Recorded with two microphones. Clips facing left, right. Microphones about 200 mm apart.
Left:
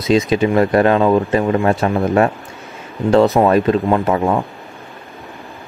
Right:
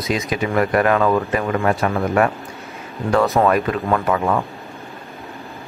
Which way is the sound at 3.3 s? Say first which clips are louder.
Left 4 dB; 25° left (ahead or behind).